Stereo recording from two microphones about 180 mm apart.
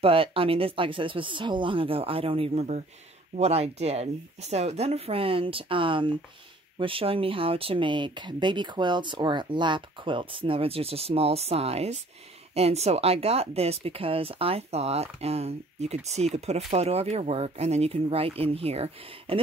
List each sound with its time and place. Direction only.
0.0 s speech: 30° right (ahead or behind)